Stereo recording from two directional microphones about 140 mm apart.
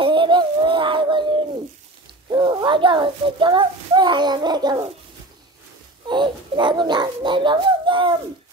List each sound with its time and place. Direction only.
0.0 s a sound: 35° right (ahead or behind)
2.2 s a child's voice: 30° right (ahead or behind)
6.0 s a child's voice: 35° right (ahead or behind)